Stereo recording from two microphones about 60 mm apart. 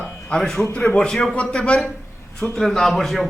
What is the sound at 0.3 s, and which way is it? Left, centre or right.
Speech, centre.